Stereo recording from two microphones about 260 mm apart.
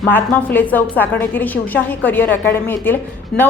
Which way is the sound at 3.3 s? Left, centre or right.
Left.